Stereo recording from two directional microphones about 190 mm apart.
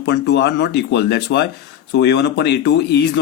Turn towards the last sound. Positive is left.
turn(degrees=60)  # may be behind; listen again after turning